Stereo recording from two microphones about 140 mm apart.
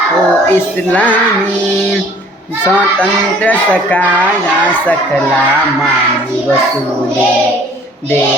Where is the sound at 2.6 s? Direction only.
10° left (ahead or behind).